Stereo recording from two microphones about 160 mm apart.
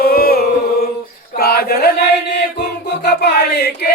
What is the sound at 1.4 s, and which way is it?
Chant, 75° left (ahead or behind).